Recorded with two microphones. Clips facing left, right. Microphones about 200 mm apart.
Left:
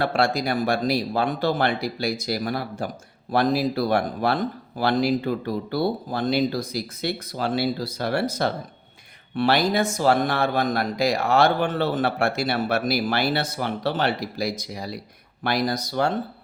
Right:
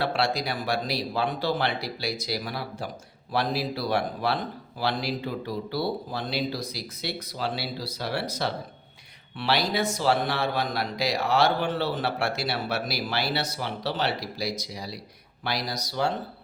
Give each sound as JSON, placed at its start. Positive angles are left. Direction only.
{"t": 0.0, "sound": "speech", "side_deg": 50}